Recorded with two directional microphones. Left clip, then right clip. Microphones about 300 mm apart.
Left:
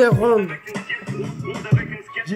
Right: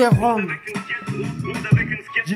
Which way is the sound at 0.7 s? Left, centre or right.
Right.